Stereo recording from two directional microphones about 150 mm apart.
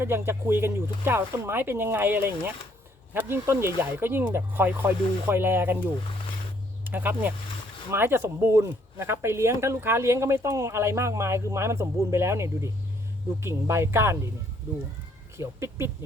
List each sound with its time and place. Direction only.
0.0 s speech: 15° right (ahead or behind)
15.4 s speech: 20° right (ahead or behind)